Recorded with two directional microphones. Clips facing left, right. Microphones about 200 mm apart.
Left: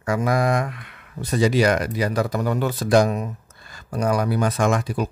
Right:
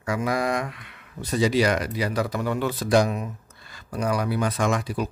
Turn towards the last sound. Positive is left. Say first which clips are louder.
# left 3 dB
turn(degrees=45)  # may be behind; listen again after turning